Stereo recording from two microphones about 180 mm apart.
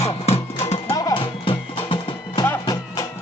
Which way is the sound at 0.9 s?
25° left (ahead or behind).